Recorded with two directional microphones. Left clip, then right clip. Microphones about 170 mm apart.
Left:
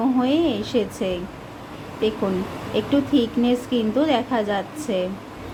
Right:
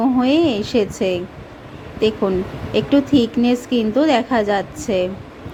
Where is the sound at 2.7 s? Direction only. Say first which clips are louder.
Right 5 dB; 25° right (ahead or behind).